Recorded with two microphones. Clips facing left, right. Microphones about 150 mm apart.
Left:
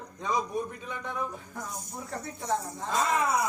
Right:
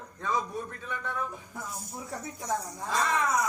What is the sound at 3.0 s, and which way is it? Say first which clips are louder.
Speech: left 1 dB; 30° left (ahead or behind).